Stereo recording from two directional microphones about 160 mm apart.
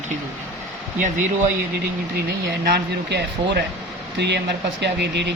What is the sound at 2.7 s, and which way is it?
Speech, 90° right.